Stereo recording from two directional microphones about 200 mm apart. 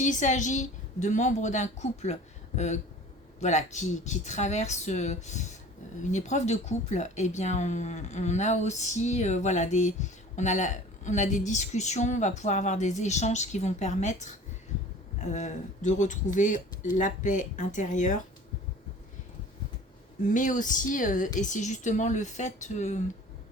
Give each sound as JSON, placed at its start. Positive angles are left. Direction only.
{"t": 0.0, "sound": "speech", "side_deg": 40}
{"t": 20.2, "sound": "speech", "side_deg": 40}